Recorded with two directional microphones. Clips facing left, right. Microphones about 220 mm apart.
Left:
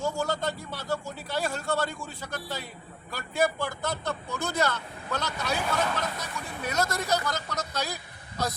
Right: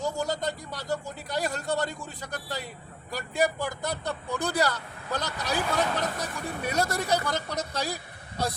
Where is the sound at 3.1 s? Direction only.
15° right (ahead or behind).